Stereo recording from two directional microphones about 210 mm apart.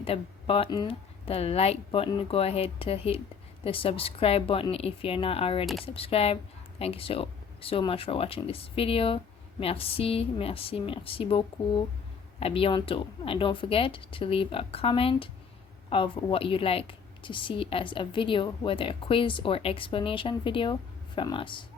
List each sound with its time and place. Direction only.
0.0 s speech: 25° left (ahead or behind)